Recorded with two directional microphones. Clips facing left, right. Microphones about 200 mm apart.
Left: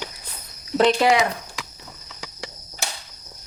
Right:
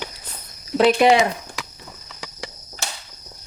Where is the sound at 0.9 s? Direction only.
25° right (ahead or behind).